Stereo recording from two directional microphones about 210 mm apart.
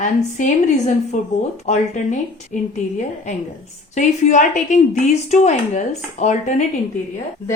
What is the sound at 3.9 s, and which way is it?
Speech, 35° left (ahead or behind).